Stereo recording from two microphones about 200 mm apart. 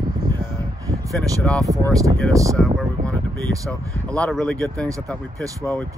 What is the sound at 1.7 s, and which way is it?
Speech, 15° right (ahead or behind).